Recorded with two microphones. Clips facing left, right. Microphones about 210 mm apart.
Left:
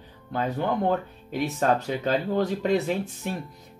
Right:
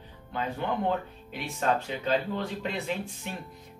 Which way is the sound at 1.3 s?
40° left (ahead or behind).